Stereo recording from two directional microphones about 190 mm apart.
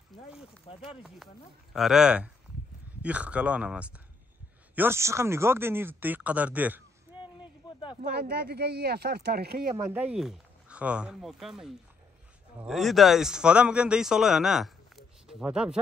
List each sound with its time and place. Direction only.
0.8 s a man's voice: centre (ahead or behind)
7.6 s a sound: 20° left (ahead or behind)
8.2 s speech: 55° right (ahead or behind)
9.8 s a man's voice: 10° right (ahead or behind)